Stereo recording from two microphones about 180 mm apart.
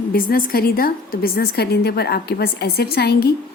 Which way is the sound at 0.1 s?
55° left (ahead or behind).